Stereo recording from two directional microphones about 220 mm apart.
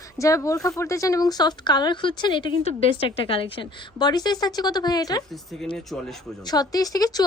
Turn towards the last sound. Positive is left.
turn(degrees=15)  # may be behind; listen again after turning